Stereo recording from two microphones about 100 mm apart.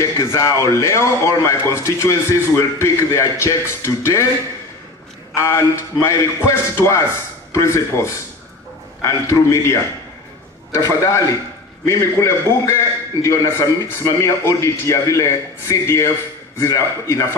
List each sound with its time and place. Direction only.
0.0 s a man's voice: 25° left (ahead or behind)
5.3 s a man's voice: 30° left (ahead or behind)
10.8 s a man's voice: 30° left (ahead or behind)